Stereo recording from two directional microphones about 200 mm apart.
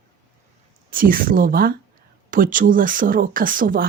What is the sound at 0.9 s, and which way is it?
Speech, 45° right (ahead or behind).